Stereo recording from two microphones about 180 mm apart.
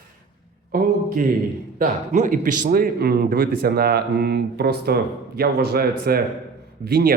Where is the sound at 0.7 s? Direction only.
50° right (ahead or behind).